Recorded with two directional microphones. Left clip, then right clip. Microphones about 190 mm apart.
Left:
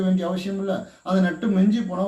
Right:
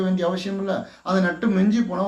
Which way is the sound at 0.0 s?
20° left (ahead or behind).